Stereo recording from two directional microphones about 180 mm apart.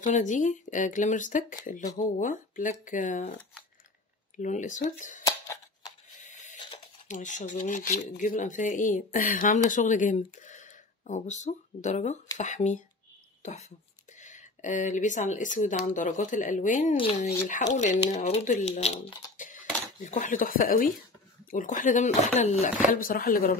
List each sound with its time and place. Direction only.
0.0 s speech: 45° left (ahead or behind)
4.4 s speech: 45° left (ahead or behind)
5.2 s scissors: 20° left (ahead or behind)
5.9 s a sound: 40° left (ahead or behind)
6.6 s a sound: 30° left (ahead or behind)
7.1 s speech: 45° left (ahead or behind)
16.9 s speech: 30° left (ahead or behind)
19.3 s dishes: 45° left (ahead or behind)
21.5 s speech: 45° left (ahead or behind)
22.8 s speech: 50° left (ahead or behind)